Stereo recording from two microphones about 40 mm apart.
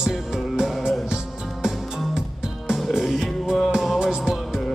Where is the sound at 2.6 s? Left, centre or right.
Centre.